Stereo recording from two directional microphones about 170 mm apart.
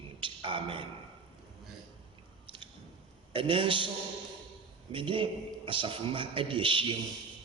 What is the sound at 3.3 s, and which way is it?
Speech, 30° right (ahead or behind).